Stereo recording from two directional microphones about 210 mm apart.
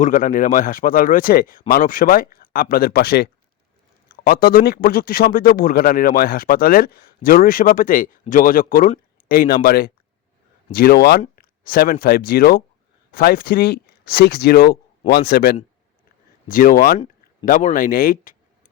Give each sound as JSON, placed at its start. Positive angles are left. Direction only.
{"t": 0.0, "sound": "speech", "side_deg": 40}